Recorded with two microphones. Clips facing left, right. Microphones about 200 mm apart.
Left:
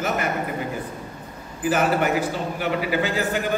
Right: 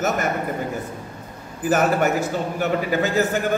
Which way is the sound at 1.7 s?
45° right (ahead or behind).